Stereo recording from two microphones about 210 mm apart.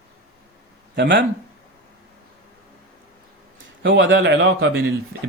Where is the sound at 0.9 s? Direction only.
55° right (ahead or behind).